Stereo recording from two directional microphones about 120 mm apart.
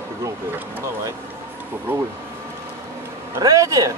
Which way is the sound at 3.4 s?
30° right (ahead or behind).